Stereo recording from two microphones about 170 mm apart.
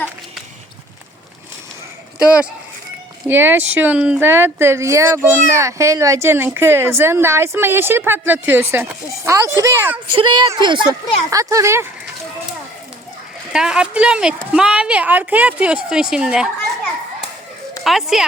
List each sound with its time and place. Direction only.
2.1 s a woman's voice: 5° right (ahead or behind)
10.2 s a woman's voice: 25° right (ahead or behind)
13.5 s speech: 5° right (ahead or behind)
17.8 s speech: centre (ahead or behind)